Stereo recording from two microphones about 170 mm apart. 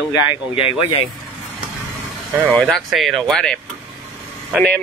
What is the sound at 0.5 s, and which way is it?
Speech, 35° left (ahead or behind).